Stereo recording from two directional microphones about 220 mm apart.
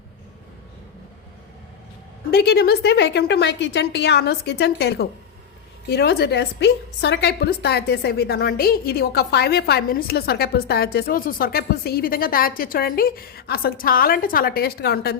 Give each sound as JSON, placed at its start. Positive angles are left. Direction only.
{"t": 2.3, "sound": "a woman's voice", "side_deg": 45}